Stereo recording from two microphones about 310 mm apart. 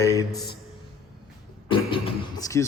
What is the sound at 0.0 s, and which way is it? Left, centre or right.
Speech, centre.